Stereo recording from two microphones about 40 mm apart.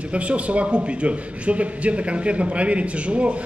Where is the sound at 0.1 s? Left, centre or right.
Right.